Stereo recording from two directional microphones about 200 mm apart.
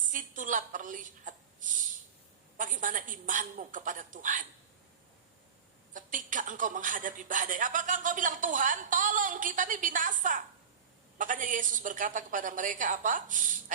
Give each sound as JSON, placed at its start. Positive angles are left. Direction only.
{"t": 0.1, "sound": "speech", "side_deg": -40}
{"t": 2.6, "sound": "speech", "side_deg": -40}
{"t": 5.9, "sound": "speech", "side_deg": -40}